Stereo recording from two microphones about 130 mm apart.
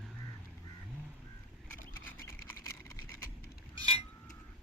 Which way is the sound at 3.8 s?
35° right (ahead or behind).